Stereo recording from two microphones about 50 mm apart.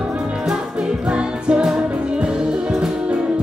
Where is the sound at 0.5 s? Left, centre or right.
Centre.